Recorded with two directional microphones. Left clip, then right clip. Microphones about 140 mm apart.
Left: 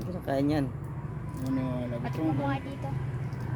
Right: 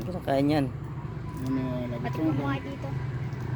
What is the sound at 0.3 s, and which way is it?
Speech, 5° right (ahead or behind).